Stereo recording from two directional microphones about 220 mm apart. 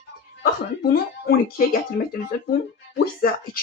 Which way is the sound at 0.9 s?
45° left (ahead or behind).